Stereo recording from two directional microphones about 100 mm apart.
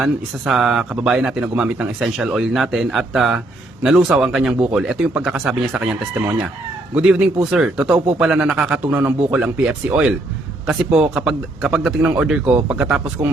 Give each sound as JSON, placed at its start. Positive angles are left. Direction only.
{"t": 0.0, "sound": "a man's voice", "side_deg": -5}
{"t": 8.9, "sound": "a man's voice", "side_deg": -15}
{"t": 11.3, "sound": "a man's voice", "side_deg": -5}